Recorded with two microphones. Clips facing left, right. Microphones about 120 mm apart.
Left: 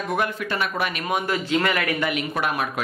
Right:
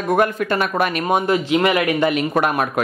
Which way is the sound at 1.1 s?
20° right (ahead or behind).